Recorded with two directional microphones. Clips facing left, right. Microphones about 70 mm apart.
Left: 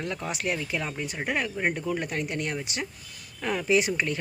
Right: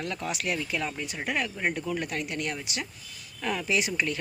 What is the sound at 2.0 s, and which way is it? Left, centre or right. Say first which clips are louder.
Speech: left 2 dB; left.